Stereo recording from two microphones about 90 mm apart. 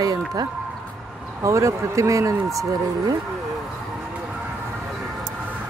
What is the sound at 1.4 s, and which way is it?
Speech, 35° right (ahead or behind).